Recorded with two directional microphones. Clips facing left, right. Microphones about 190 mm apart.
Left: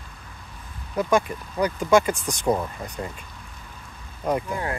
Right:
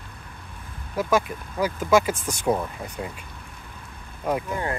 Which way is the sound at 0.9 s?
5° right (ahead or behind).